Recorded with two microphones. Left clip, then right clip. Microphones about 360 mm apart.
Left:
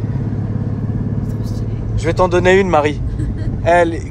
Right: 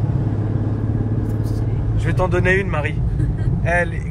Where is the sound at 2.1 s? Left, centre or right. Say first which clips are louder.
Left 6 dB; centre.